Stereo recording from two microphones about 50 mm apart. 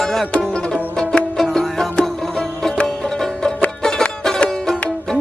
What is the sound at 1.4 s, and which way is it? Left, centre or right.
Music, centre.